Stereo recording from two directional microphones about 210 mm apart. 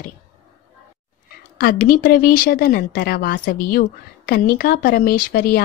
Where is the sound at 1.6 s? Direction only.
40° left (ahead or behind).